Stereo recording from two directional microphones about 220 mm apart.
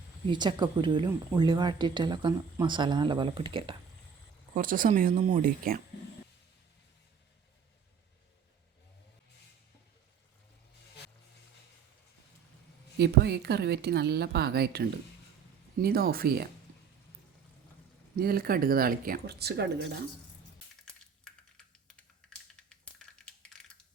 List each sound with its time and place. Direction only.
0.3 s speech: 20° right (ahead or behind)
4.5 s speech: 40° right (ahead or behind)
13.0 s a woman's voice: 50° right (ahead or behind)
18.2 s speech: 40° right (ahead or behind)
21.8 s typing: 5° left (ahead or behind)